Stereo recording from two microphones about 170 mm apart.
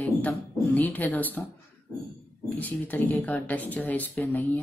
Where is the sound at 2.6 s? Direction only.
10° left (ahead or behind).